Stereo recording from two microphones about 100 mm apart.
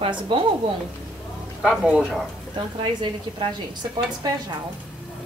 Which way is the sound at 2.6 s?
50° right (ahead or behind).